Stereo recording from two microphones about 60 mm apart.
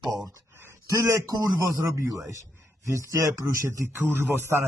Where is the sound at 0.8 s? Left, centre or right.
Right.